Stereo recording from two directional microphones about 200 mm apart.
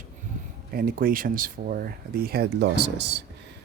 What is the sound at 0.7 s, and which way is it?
Speech, 45° right (ahead or behind).